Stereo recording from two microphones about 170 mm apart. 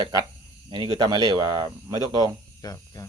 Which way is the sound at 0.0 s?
25° right (ahead or behind).